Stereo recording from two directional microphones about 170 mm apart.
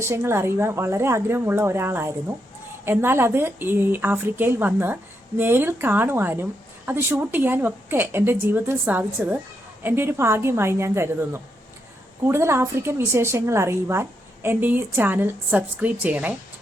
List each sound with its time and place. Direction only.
0.0 s a woman's voice: 15° right (ahead or behind)